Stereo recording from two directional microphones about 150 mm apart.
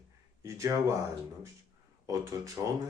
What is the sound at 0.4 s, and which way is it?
Speech, 20° right (ahead or behind).